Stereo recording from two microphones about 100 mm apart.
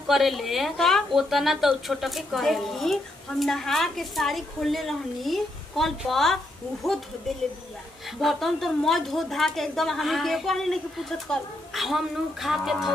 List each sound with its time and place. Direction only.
0.0 s a woman's voice: centre (ahead or behind)
8.2 s a woman's voice: centre (ahead or behind)